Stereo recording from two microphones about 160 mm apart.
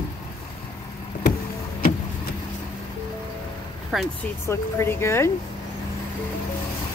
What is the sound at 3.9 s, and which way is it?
Speech, centre (ahead or behind).